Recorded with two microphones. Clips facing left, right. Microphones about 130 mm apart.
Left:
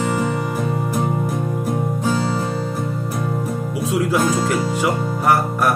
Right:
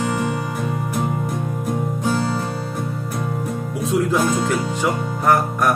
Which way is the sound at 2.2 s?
20° left (ahead or behind).